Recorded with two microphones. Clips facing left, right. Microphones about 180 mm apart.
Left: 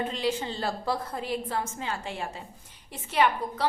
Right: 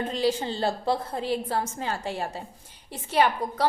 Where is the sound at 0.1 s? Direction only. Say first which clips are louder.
Right 4 dB; 35° right (ahead or behind).